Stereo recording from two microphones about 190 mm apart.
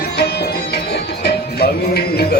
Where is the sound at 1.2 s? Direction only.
55° left (ahead or behind).